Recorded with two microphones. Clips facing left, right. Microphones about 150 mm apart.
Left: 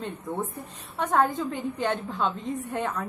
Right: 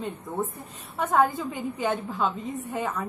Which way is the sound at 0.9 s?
Centre (ahead or behind).